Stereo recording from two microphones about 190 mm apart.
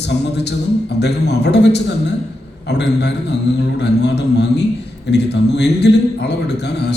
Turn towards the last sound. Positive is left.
turn(degrees=60)  # may be behind; listen again after turning